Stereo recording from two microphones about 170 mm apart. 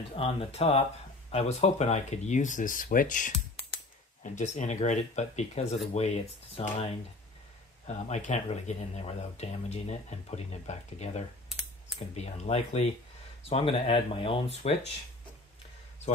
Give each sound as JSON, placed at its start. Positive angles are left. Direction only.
{"t": 0.1, "sound": "speech", "side_deg": 35}
{"t": 7.8, "sound": "speech", "side_deg": 40}